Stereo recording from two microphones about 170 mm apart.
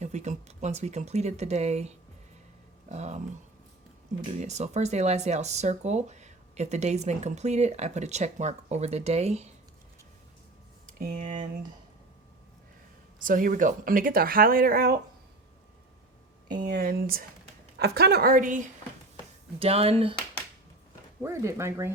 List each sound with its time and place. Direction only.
0.0 s speech: 45° right (ahead or behind)
2.9 s speech: 40° right (ahead or behind)
4.3 s speech: 40° right (ahead or behind)
11.0 s speech: 50° right (ahead or behind)
13.1 s speech: 50° right (ahead or behind)
16.6 s speech: 65° right (ahead or behind)
17.7 s speech: 70° right (ahead or behind); by 18.6 s 50° right (ahead or behind)
19.5 s speech: 35° right (ahead or behind)
21.2 s speech: 15° right (ahead or behind)